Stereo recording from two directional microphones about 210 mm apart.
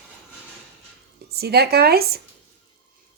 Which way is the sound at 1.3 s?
50° right (ahead or behind).